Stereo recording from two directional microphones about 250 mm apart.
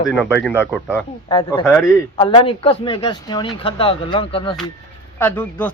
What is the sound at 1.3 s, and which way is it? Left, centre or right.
Speech, centre.